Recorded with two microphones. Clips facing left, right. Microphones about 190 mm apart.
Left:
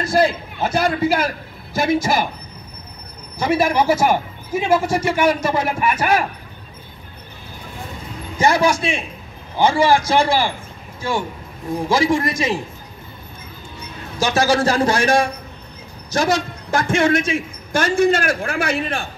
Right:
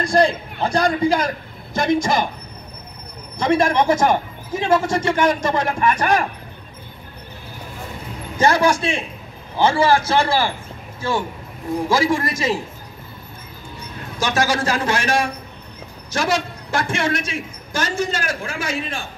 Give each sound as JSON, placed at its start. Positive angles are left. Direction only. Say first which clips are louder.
{"t": 0.0, "sound": "a man's voice", "louder": "even", "side_deg": 5}
{"t": 3.3, "sound": "a man's voice", "louder": "even", "side_deg": 5}
{"t": 8.4, "sound": "a man's voice", "louder": "even", "side_deg": 10}
{"t": 10.1, "sound": "a man's voice", "louder": "left 1 dB", "side_deg": 15}
{"t": 11.9, "sound": "a man's voice", "louder": "left 2 dB", "side_deg": 20}
{"t": 14.2, "sound": "a man's voice", "louder": "left 3 dB", "side_deg": 30}